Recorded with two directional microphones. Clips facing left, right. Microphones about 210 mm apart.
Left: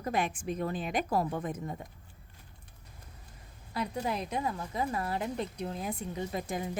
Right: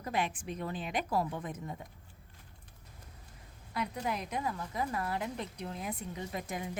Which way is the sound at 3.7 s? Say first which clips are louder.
Left 2 dB; 30° left (ahead or behind).